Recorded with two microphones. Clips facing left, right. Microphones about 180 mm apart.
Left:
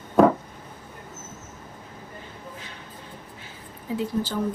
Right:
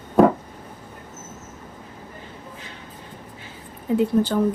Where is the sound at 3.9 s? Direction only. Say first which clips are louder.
Right 8 dB; 60° right (ahead or behind).